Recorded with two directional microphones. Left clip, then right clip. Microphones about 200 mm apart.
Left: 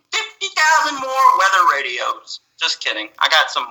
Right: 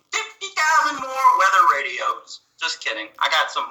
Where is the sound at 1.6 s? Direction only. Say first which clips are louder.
Left 1 dB; 50° left (ahead or behind).